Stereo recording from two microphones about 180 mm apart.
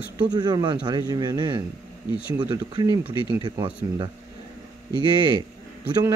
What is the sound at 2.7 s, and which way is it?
A man's voice, 20° right (ahead or behind).